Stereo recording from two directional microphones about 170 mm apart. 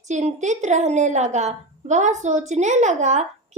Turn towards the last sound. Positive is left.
turn(degrees=-45)  # may be behind; listen again after turning